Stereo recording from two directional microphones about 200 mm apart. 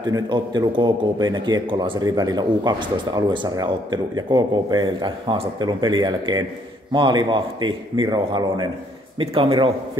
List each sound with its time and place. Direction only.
0.1 s a man's voice: 20° right (ahead or behind)